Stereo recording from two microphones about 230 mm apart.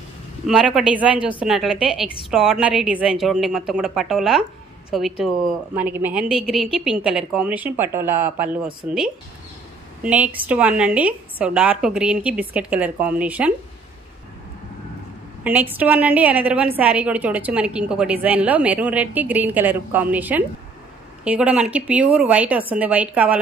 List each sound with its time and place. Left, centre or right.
0.5 s a woman's voice: centre
15.4 s a woman's voice: centre